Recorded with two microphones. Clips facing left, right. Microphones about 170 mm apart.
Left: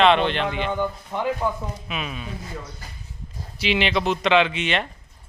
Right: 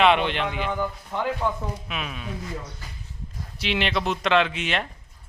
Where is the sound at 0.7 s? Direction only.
20° left (ahead or behind).